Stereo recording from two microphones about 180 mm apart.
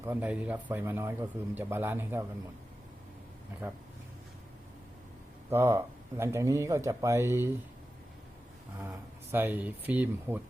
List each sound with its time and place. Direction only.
0.0 s a man's voice: 10° right (ahead or behind)
5.5 s a man's voice: 15° right (ahead or behind)
8.8 s a man's voice: 10° right (ahead or behind)